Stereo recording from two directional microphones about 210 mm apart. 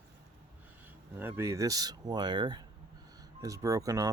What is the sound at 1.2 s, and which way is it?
Speech, 15° right (ahead or behind).